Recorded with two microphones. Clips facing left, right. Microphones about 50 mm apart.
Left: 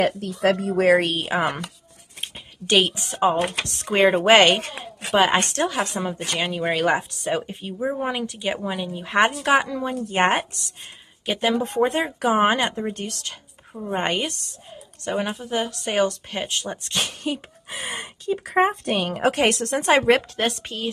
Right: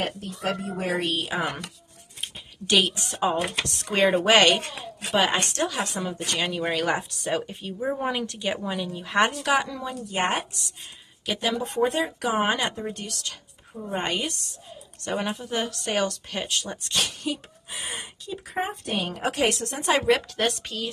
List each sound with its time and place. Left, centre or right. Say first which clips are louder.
0.0 s speech: left 8 dB; left
1.3 s a woman's voice: left 5 dB; left
6.3 s a woman's voice: left 3 dB; centre; by 14.3 s left
15.0 s speech: left 3 dB; centre
15.8 s speech: left 4 dB; centre; by 18.5 s left
18.5 s speech: left 8 dB; left
19.2 s a woman's voice: left 5 dB; left
20.0 s a woman's voice: left 2 dB; left
20.3 s speech: left 1 dB; left